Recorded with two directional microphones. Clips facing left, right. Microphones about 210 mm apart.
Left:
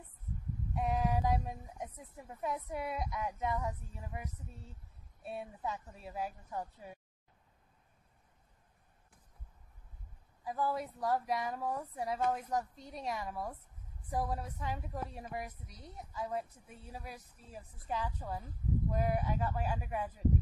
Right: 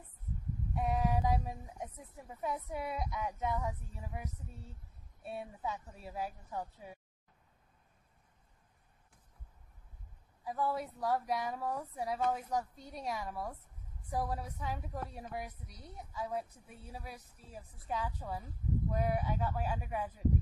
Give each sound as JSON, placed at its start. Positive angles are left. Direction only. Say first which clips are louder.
{"t": 0.7, "sound": "a woman's voice", "louder": "even", "side_deg": 0}
{"t": 10.4, "sound": "a woman's voice", "louder": "even", "side_deg": 0}